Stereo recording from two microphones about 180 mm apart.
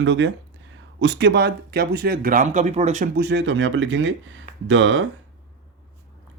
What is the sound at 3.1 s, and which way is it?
Speech, 70° right (ahead or behind).